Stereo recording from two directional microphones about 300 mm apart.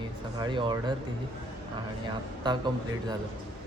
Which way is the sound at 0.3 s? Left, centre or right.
Centre.